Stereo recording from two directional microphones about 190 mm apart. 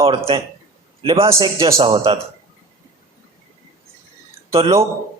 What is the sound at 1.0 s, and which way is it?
A man's voice, 25° right (ahead or behind).